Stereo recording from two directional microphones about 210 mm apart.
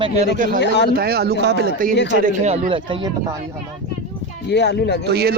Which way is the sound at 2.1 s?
35° right (ahead or behind).